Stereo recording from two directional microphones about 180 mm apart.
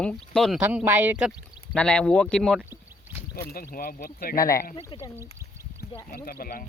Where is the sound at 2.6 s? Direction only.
10° right (ahead or behind).